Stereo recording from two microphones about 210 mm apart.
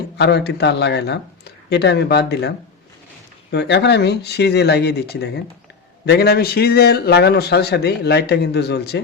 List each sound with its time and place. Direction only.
0.2 s speech: 55° left (ahead or behind)
3.5 s speech: 55° left (ahead or behind)